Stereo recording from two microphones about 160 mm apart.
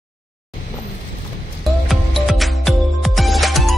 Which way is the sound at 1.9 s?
Centre (ahead or behind).